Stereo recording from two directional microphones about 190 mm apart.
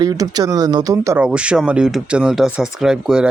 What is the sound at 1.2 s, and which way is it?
Speech, 5° right (ahead or behind).